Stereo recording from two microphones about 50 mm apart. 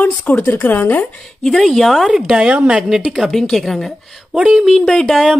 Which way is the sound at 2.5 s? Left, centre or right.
Right.